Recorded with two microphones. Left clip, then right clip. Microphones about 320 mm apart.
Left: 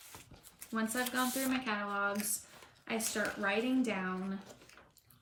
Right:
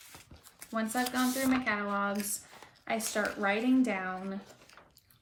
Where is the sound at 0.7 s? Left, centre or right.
Centre.